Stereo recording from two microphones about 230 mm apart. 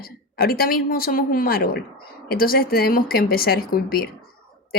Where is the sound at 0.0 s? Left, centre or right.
Left.